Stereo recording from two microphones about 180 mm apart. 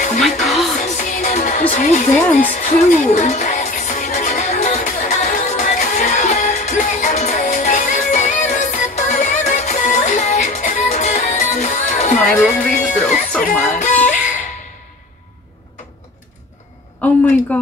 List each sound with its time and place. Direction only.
0.2 s music: centre (ahead or behind)
0.8 s music: 45° left (ahead or behind)
1.7 s speech: 45° left (ahead or behind)
2.3 s music: 50° left (ahead or behind)
12.2 s music: 5° left (ahead or behind)
12.7 s music: 45° left (ahead or behind)
17.0 s a sound: 5° left (ahead or behind)